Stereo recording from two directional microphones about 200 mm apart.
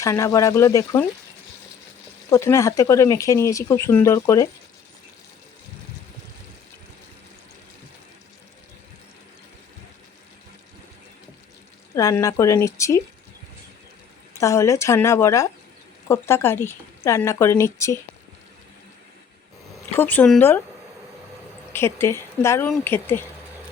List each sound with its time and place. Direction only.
0.0 s speech: 15° left (ahead or behind)
2.3 s speech: 15° left (ahead or behind)
11.9 s speech: 15° left (ahead or behind)
14.3 s speech: 15° left (ahead or behind)
20.0 s speech: 10° left (ahead or behind)
21.7 s speech: 10° left (ahead or behind)